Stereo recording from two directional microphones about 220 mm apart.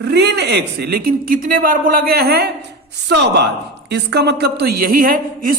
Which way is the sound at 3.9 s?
50° right (ahead or behind).